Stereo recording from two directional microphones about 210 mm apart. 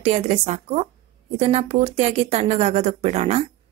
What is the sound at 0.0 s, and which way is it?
Speech, 30° right (ahead or behind).